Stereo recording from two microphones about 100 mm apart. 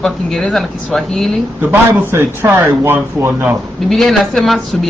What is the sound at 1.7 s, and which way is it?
Speech, 25° right (ahead or behind).